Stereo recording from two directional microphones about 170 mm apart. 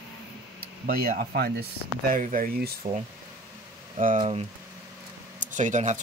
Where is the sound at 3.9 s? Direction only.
45° right (ahead or behind).